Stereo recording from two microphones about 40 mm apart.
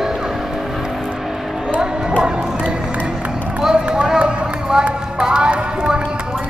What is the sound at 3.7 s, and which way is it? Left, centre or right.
Run, right.